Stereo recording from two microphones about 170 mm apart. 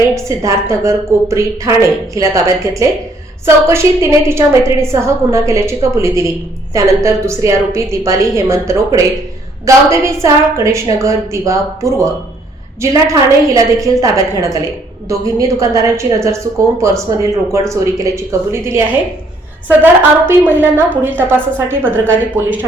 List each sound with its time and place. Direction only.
0.1 s a woman's voice: 20° right (ahead or behind)
15.1 s a woman's voice: 20° right (ahead or behind)